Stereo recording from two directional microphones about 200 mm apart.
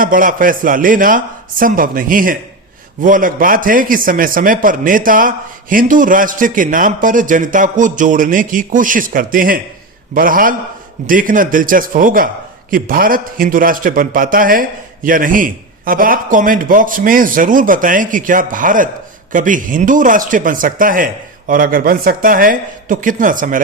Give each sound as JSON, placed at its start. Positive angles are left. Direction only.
{"t": 0.0, "sound": "a man's voice", "side_deg": -45}